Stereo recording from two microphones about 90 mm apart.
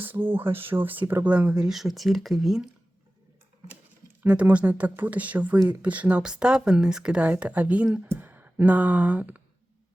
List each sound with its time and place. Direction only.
0.0 s speech: 25° right (ahead or behind); by 2.6 s centre (ahead or behind)
4.2 s speech: 15° right (ahead or behind)